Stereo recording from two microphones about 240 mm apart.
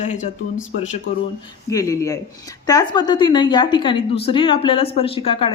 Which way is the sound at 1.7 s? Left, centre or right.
Centre.